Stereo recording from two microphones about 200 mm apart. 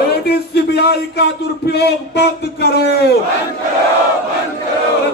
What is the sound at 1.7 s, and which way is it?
A man's voice, 55° left (ahead or behind).